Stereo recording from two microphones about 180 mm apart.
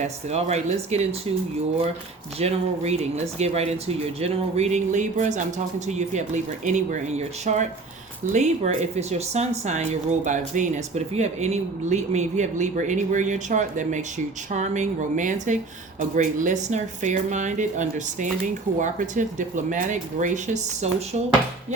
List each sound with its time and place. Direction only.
0.0 s speech: 40° right (ahead or behind)
2.4 s speech: 35° right (ahead or behind)